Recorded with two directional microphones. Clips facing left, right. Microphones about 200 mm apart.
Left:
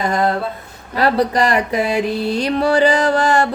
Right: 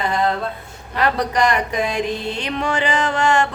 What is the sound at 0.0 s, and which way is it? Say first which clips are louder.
Mantra: left 2 dB; 45° left (ahead or behind).